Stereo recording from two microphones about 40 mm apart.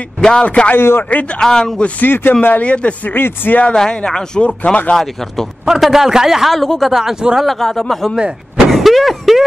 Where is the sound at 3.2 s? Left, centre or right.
Left.